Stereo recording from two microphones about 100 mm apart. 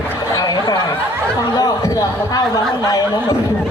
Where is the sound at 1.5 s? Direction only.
40° left (ahead or behind).